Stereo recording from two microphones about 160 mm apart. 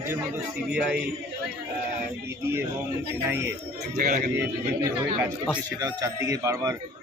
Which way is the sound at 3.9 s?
55° right (ahead or behind).